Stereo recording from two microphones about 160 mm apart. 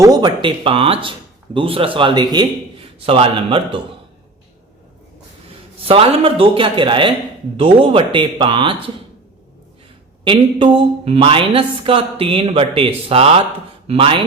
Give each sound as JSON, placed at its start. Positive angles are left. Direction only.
{"t": 0.0, "sound": "speech", "side_deg": -25}
{"t": 5.8, "sound": "speech", "side_deg": -35}
{"t": 10.2, "sound": "speech", "side_deg": -35}